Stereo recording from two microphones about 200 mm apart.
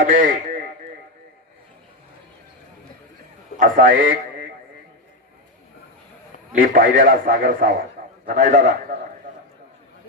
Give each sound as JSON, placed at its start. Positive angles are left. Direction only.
{"t": 0.0, "sound": "a man's voice", "side_deg": -45}
{"t": 3.6, "sound": "a man's voice", "side_deg": -45}
{"t": 6.5, "sound": "a man's voice", "side_deg": -45}